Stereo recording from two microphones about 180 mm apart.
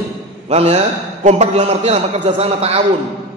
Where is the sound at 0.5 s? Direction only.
35° right (ahead or behind).